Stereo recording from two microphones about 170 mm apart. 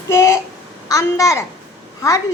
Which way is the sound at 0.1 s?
15° left (ahead or behind).